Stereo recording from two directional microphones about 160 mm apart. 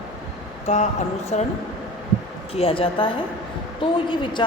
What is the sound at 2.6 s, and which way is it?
A woman's voice, 35° left (ahead or behind).